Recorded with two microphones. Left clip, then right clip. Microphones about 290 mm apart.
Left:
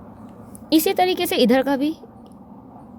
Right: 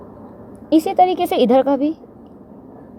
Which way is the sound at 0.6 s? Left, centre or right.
Left.